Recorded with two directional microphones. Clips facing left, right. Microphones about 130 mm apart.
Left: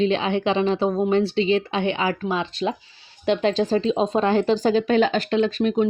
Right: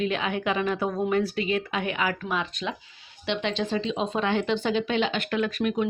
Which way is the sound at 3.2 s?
40° left (ahead or behind).